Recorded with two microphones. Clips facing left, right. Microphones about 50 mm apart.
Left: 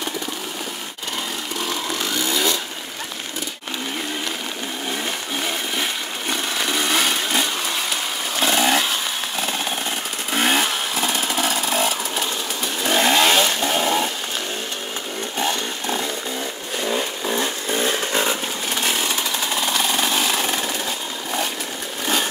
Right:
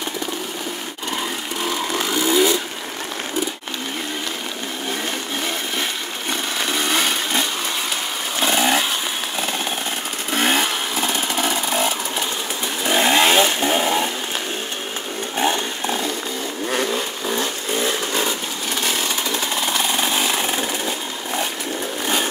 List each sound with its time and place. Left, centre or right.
1.7 s vehicle: centre
6.3 s a sound: centre
8.4 s motorcycle: centre
9.4 s a sound: centre
10.3 s motorcycle: centre
12.8 s vehicle: centre
15.3 s chainsaw: centre
17.7 s vehicle: left
18.8 s chainsaw: centre
22.0 s a sound: centre